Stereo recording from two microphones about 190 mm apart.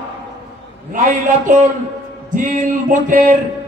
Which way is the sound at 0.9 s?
45° right (ahead or behind).